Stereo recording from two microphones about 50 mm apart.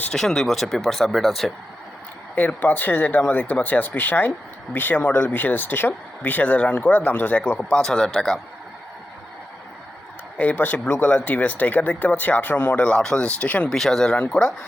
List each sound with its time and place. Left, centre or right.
0.1 s speech: centre
2.3 s speech: left
7.5 s speech: left
10.3 s speech: left
12.9 s speech: centre
13.7 s speech: centre